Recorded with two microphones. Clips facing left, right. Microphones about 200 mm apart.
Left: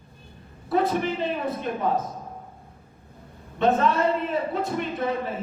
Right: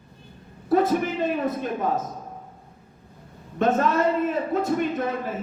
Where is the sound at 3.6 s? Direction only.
50° right (ahead or behind).